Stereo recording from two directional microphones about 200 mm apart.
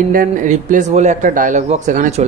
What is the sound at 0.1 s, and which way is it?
Speech, 40° right (ahead or behind).